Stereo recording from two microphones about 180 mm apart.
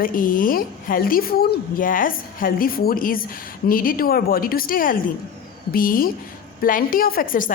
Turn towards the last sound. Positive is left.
turn(degrees=50)  # may be behind; listen again after turning